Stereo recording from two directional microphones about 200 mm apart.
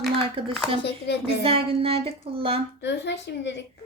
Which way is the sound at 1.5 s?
30° right (ahead or behind).